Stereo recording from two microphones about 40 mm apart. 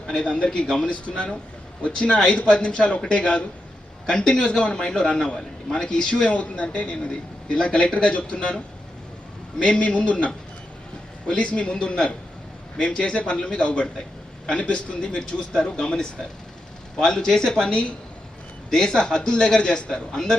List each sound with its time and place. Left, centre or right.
0.2 s a man's voice: left
11.3 s a man's voice: left